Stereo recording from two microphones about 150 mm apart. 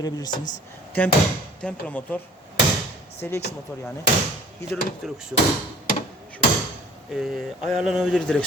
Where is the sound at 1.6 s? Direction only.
10° left (ahead or behind).